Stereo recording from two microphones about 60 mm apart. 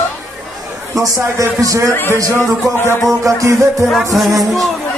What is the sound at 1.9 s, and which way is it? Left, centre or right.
Speech, left.